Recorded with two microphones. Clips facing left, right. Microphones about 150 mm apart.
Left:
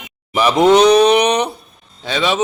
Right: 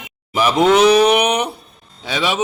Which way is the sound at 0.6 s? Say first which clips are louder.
Left 2 dB; 5° right (ahead or behind).